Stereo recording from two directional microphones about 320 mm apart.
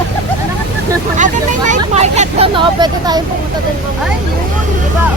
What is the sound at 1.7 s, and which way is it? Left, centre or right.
Speech, right.